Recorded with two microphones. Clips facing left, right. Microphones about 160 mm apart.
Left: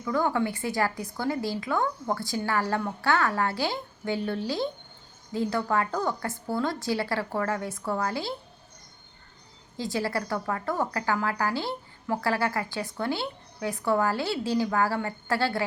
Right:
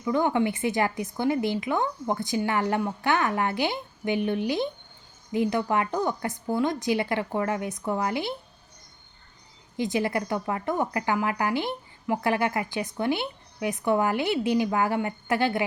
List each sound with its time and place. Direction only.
0.0 s speech: 20° right (ahead or behind)
9.7 s speech: 20° right (ahead or behind)